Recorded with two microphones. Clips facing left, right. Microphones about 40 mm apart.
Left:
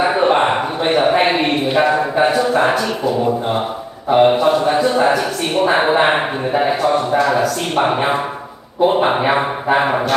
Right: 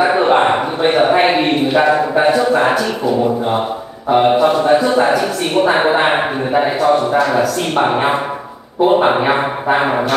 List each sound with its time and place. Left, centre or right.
0.0 s a sound: centre
1.8 s speech: centre
4.1 s a man's voice: centre